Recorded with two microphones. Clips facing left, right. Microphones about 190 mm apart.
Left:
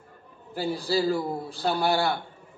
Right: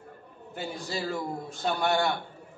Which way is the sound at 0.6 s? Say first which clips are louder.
Left 8 dB; 35° left (ahead or behind).